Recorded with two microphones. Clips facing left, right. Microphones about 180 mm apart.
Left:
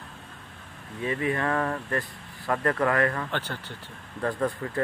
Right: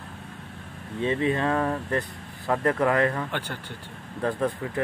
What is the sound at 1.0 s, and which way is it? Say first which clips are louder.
Speech: right 3 dB; 20° right (ahead or behind).